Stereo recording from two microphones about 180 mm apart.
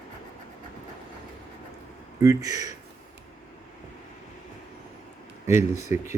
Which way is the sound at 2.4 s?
20° right (ahead or behind).